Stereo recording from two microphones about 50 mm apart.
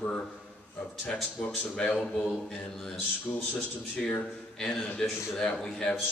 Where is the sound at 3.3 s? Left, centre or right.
Left.